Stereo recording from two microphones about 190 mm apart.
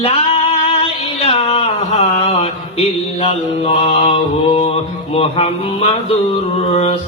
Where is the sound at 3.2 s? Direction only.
30° left (ahead or behind).